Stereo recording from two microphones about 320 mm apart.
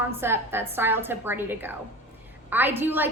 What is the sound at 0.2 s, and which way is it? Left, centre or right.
A woman's voice, centre.